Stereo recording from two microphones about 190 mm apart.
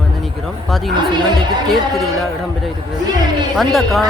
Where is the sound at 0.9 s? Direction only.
25° right (ahead or behind).